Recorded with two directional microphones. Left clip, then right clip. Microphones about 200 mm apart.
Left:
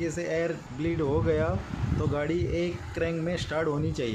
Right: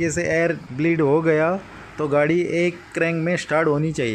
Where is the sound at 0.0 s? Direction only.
35° right (ahead or behind).